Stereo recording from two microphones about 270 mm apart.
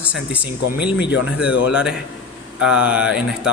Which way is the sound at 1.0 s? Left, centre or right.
Left.